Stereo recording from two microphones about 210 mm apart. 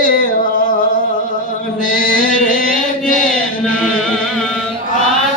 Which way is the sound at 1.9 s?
40° left (ahead or behind).